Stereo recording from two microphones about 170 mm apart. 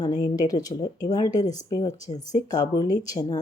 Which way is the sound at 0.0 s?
25° left (ahead or behind).